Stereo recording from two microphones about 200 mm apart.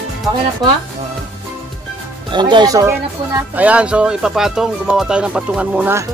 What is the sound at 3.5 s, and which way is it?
Speech, 5° right (ahead or behind).